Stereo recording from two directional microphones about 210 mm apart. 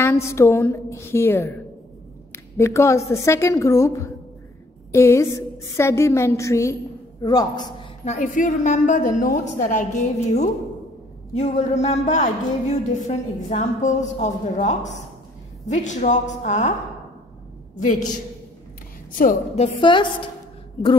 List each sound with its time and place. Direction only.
0.0 s a woman's voice: 10° left (ahead or behind)
8.0 s a woman's voice: 35° left (ahead or behind)
19.1 s a woman's voice: 35° left (ahead or behind)